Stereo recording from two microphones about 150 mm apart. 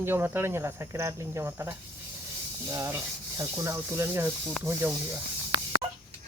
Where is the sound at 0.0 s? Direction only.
15° right (ahead or behind).